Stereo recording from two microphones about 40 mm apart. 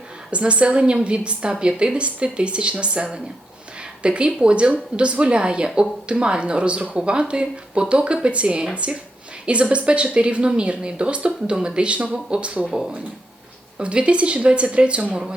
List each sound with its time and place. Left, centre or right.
0.3 s a woman's voice: right